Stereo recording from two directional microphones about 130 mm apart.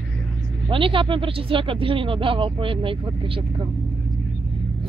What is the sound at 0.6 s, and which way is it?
Speech, 40° right (ahead or behind).